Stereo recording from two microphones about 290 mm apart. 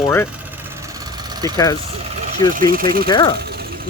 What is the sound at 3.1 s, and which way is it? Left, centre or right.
Speech, centre.